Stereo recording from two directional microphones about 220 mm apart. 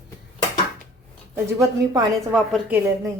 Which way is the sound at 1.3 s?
10° right (ahead or behind).